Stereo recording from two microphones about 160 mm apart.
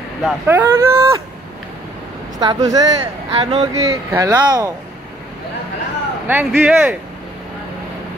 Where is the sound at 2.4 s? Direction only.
25° right (ahead or behind).